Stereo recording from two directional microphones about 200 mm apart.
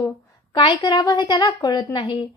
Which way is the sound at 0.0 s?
20° left (ahead or behind).